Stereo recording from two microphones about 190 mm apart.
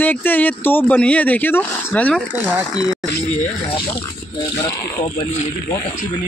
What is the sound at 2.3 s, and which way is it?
Speech, 10° right (ahead or behind).